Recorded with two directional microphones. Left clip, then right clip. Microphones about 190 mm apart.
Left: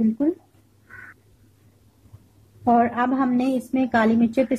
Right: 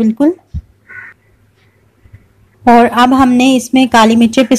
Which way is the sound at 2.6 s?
35° right (ahead or behind).